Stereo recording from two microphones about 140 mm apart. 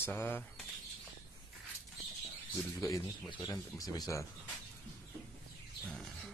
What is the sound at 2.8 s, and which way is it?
Speech, 25° left (ahead or behind).